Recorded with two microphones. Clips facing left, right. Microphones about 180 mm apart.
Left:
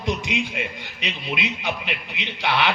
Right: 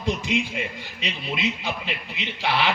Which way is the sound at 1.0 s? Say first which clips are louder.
Even; 65° left (ahead or behind).